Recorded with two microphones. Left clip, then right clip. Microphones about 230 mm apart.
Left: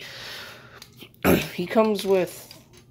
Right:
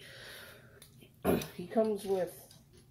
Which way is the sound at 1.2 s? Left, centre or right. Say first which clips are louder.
Left 11 dB; left.